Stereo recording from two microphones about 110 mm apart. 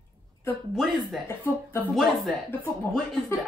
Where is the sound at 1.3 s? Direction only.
20° left (ahead or behind).